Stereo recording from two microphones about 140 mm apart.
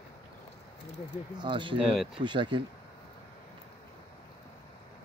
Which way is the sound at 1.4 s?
35° right (ahead or behind).